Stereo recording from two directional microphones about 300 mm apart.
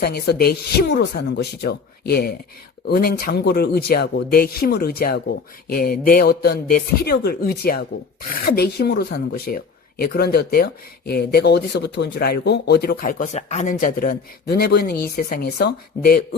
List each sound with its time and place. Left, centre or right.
0.0 s speech: left